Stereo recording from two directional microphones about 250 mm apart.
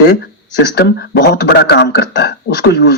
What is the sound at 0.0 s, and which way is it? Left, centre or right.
Speech, left.